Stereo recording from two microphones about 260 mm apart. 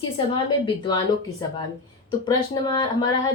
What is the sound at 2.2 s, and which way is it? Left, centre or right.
Speech, centre.